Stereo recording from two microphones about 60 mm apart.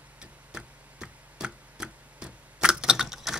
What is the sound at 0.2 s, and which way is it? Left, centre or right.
Tick-tock, centre.